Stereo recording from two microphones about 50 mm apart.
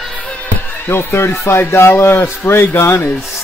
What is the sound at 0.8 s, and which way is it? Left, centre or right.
A man's voice, left.